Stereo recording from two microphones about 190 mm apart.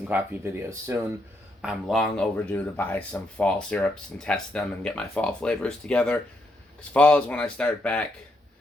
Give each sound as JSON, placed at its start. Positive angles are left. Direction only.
{"t": 0.1, "sound": "speech", "side_deg": -10}
{"t": 1.6, "sound": "speech", "side_deg": 0}